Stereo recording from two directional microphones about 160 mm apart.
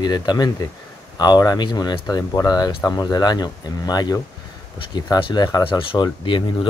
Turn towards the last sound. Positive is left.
turn(degrees=30)  # may be behind; listen again after turning